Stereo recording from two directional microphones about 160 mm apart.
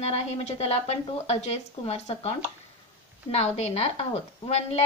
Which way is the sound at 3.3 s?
40° left (ahead or behind).